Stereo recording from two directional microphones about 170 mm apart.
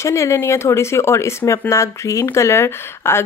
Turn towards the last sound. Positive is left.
turn(degrees=15)  # may be behind; listen again after turning